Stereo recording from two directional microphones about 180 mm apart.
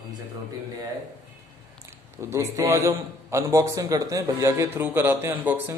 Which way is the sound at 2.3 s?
15° right (ahead or behind).